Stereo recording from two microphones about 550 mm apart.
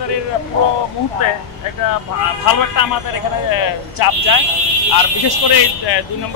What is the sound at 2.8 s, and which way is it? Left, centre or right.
Speech, left.